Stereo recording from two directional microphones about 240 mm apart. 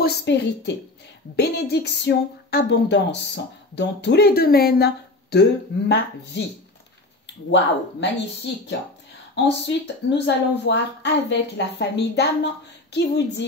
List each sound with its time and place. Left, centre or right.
0.0 s speech: left
9.3 s speech: left